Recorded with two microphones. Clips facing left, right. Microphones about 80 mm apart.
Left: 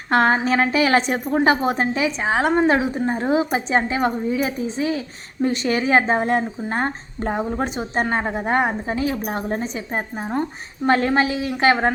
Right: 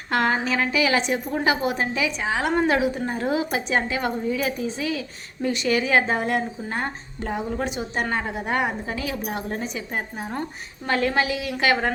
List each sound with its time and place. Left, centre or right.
0.1 s a woman's voice: left